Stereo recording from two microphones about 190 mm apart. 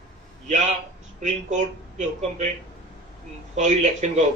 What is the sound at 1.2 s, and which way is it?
A man's voice, 40° right (ahead or behind).